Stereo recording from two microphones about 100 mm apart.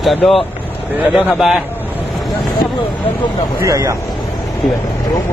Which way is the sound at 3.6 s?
30° right (ahead or behind).